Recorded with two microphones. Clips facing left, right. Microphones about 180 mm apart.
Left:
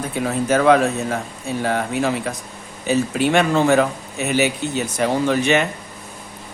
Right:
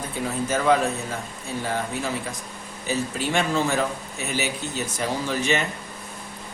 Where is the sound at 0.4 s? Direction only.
70° left (ahead or behind).